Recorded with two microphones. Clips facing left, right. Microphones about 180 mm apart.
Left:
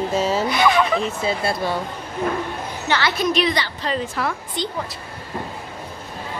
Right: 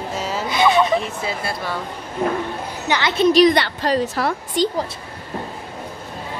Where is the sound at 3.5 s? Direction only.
60° right (ahead or behind).